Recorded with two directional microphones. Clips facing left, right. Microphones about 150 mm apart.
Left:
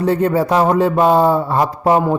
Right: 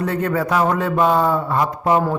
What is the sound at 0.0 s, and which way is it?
Speech, 30° left (ahead or behind).